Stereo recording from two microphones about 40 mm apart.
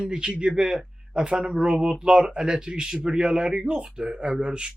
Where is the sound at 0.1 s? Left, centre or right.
Right.